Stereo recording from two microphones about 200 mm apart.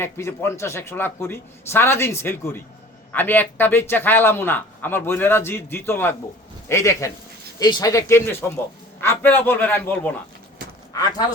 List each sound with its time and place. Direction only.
0.0 s a man's voice: 10° left (ahead or behind)